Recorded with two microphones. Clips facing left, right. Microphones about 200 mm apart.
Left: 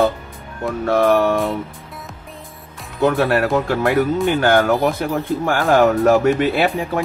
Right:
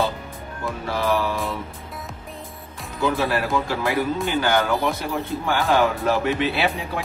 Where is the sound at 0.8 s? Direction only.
60° left (ahead or behind).